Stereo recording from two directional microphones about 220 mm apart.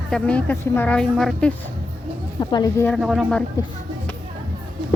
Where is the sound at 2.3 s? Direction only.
15° left (ahead or behind).